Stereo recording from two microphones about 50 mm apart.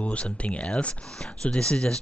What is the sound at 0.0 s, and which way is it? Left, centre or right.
Speech, left.